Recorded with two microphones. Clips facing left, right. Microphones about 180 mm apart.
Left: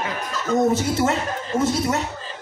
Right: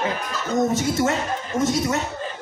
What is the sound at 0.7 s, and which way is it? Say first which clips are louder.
Speech: even; 30° left (ahead or behind).